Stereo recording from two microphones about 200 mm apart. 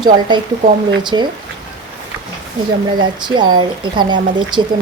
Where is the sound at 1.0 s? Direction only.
20° right (ahead or behind).